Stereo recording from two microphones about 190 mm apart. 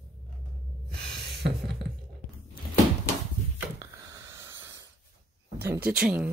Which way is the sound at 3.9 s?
15° right (ahead or behind).